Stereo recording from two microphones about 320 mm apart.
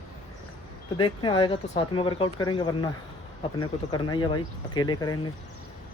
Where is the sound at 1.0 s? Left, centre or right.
Centre.